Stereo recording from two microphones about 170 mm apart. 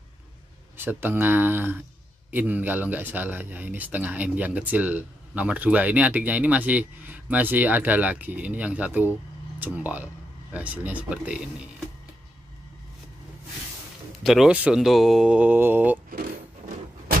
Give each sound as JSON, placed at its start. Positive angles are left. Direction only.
{"t": 0.7, "sound": "speech", "side_deg": -10}
{"t": 14.2, "sound": "speech", "side_deg": 0}
{"t": 16.1, "sound": "a sound", "side_deg": -60}